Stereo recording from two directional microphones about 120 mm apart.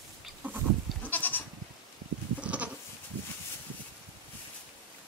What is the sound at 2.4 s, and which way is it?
Goat, 10° right (ahead or behind).